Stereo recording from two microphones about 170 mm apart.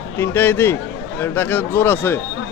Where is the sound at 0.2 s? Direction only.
15° left (ahead or behind).